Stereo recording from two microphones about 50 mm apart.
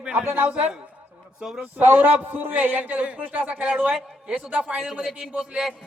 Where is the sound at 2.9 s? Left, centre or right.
Right.